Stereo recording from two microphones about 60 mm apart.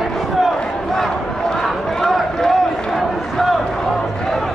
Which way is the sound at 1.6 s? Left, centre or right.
Centre.